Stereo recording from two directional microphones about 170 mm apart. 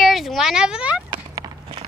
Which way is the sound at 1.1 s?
30° right (ahead or behind).